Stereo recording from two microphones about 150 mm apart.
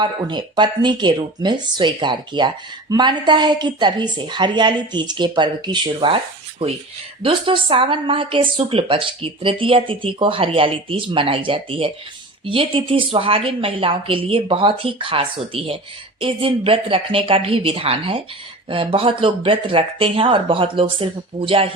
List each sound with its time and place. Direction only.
0.0 s speech: 30° right (ahead or behind)